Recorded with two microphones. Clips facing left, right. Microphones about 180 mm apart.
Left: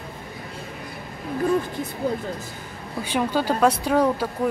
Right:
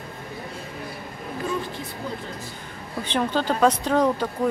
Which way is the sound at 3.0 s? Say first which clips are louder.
Left 1 dB; 10° left (ahead or behind).